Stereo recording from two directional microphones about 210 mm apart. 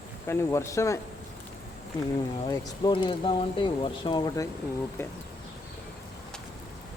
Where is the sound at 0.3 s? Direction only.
15° left (ahead or behind).